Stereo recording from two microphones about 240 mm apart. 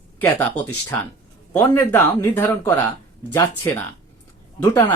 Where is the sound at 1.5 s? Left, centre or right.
Centre.